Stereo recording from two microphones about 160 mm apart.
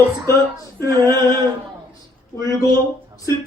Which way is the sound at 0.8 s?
25° right (ahead or behind).